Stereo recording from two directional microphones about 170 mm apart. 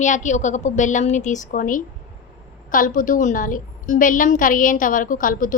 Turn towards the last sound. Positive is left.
turn(degrees=55)  # may be behind; listen again after turning